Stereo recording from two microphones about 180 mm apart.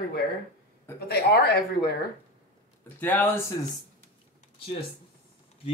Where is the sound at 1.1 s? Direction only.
60° left (ahead or behind).